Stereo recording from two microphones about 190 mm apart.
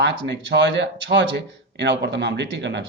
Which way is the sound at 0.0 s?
65° right (ahead or behind).